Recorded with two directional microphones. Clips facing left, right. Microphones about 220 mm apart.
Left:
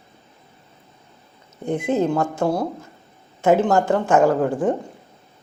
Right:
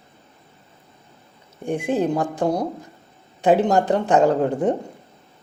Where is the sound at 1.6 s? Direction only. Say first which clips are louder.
Left 1 dB; 15° right (ahead or behind).